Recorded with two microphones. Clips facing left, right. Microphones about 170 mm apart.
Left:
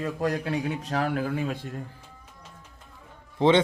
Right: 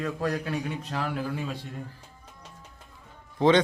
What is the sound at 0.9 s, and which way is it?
Speech, 50° left (ahead or behind).